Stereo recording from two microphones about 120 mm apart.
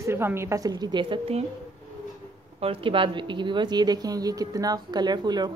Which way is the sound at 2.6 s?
50° right (ahead or behind).